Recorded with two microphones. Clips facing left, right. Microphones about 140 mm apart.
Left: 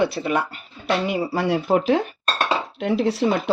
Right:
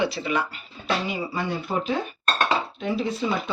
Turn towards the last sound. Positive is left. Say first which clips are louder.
# left 6 dB
turn(degrees=85)